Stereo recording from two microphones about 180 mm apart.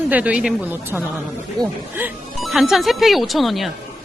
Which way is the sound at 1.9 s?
5° right (ahead or behind).